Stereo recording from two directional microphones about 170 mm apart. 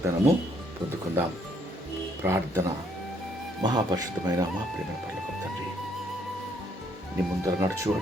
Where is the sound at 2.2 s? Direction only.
15° right (ahead or behind).